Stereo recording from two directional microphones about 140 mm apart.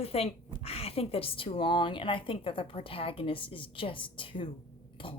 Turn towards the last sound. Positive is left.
turn(degrees=40)  # may be behind; listen again after turning